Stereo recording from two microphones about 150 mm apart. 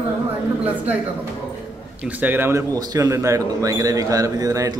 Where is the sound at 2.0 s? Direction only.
10° right (ahead or behind).